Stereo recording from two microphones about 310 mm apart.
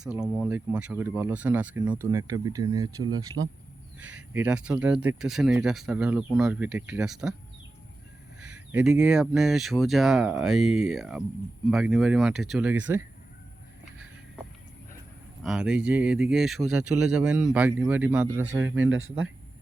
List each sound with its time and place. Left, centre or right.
0.0 s speech: centre
8.4 s speech: centre
15.4 s speech: centre
18.8 s speech: right